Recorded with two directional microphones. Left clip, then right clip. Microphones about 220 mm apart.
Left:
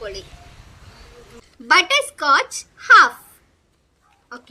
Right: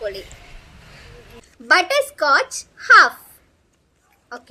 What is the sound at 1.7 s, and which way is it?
A child's voice, 20° left (ahead or behind).